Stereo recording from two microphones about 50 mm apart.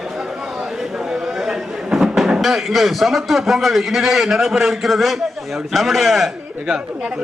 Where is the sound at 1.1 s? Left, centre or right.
Centre.